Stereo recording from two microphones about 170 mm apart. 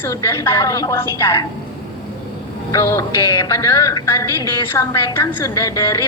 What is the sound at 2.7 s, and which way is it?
A woman's voice, 20° left (ahead or behind).